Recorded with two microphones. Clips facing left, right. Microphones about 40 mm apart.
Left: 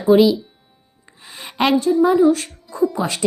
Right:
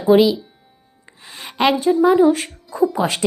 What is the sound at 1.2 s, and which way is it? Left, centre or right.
Music, centre.